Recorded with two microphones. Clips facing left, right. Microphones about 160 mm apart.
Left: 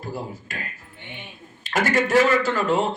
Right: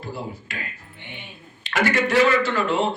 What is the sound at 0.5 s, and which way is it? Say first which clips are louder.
A man's voice: even; 45° left (ahead or behind).